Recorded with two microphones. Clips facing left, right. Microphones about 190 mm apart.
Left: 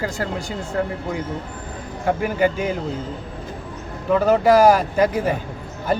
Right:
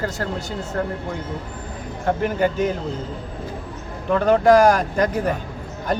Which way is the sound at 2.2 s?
10° left (ahead or behind).